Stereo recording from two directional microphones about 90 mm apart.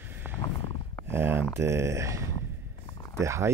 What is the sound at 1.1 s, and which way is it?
Speech, 25° right (ahead or behind).